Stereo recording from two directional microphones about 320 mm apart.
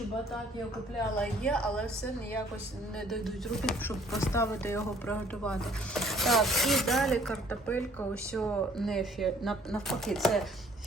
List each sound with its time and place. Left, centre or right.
1.2 s speech: centre
3.1 s speech: centre